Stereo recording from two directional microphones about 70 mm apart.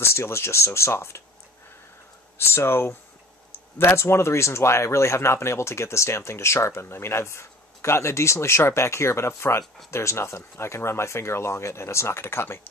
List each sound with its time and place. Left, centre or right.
0.0 s speech: left
2.3 s speech: left